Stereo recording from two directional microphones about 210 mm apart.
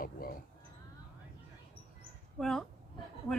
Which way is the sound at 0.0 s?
45° left (ahead or behind).